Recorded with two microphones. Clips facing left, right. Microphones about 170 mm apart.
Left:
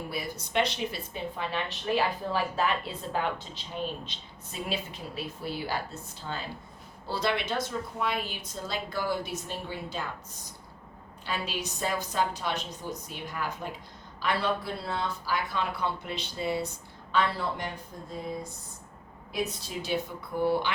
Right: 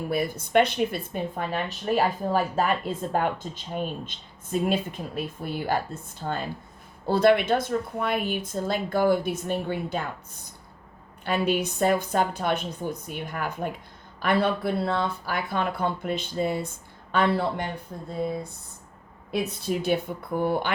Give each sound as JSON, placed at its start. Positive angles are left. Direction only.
{"t": 0.1, "sound": "speech", "side_deg": -50}
{"t": 11.3, "sound": "a woman's voice", "side_deg": -55}
{"t": 19.3, "sound": "a woman's voice", "side_deg": -55}